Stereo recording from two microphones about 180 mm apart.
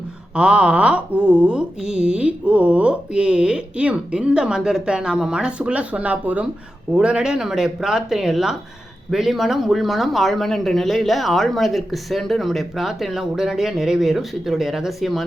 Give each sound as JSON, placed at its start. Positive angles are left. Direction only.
{"t": 0.3, "sound": "mantra", "side_deg": -5}